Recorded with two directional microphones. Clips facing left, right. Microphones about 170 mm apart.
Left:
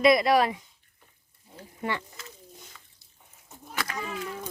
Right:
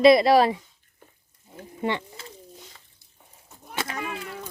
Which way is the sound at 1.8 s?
25° right (ahead or behind).